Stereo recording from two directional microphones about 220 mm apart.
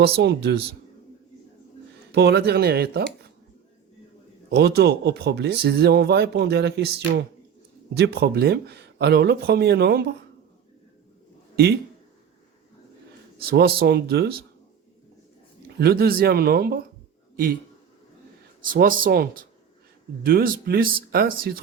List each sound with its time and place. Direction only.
0.0 s speech: 50° right (ahead or behind)
2.1 s speech: 50° right (ahead or behind)
4.4 s speech: 50° right (ahead or behind)
11.5 s speech: 45° right (ahead or behind)
13.4 s speech: 45° right (ahead or behind)
15.8 s speech: 45° right (ahead or behind)
18.7 s speech: 40° right (ahead or behind)